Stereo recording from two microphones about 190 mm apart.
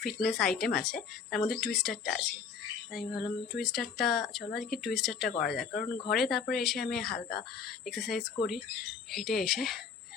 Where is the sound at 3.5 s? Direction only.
Centre (ahead or behind).